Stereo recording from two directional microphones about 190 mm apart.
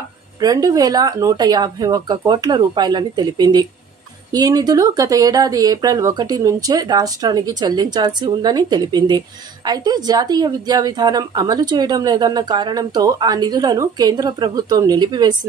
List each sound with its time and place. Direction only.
0.4 s a woman's voice: 20° right (ahead or behind)